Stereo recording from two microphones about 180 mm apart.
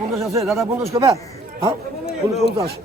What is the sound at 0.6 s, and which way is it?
Speech, 15° right (ahead or behind).